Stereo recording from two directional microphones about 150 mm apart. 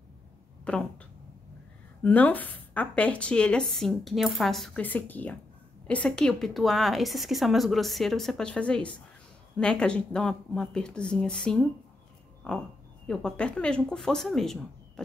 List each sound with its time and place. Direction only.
0.7 s a woman's voice: 5° left (ahead or behind)
2.0 s a woman's voice: 10° left (ahead or behind)